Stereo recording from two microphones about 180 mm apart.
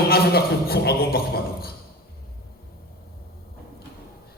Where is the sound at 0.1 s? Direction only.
60° left (ahead or behind).